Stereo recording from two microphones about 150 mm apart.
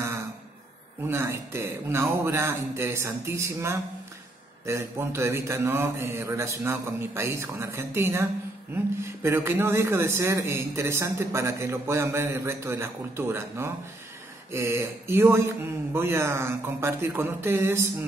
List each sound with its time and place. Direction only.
1.0 s a man's voice: 20° right (ahead or behind)